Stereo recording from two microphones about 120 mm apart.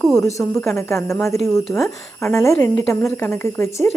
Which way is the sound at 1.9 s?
25° left (ahead or behind).